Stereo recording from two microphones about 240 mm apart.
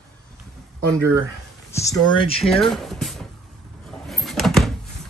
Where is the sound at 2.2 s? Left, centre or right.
Left.